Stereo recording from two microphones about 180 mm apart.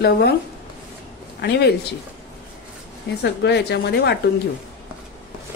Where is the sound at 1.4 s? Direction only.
65° left (ahead or behind).